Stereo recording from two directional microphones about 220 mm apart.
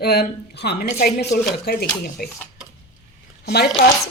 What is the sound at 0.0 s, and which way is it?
A woman's voice, 45° left (ahead or behind).